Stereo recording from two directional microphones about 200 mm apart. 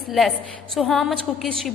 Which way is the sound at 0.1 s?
Centre (ahead or behind).